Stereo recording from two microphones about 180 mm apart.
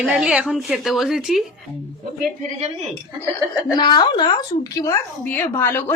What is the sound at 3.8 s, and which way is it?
A woman's voice, 25° left (ahead or behind).